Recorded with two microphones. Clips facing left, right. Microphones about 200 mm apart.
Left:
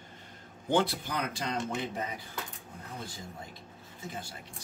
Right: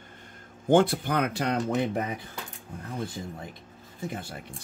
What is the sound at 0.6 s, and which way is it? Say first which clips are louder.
Speech: right 7 dB; 50° right (ahead or behind).